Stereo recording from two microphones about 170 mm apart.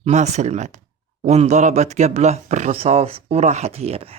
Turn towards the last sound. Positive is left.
turn(degrees=-35)  # may be behind; listen again after turning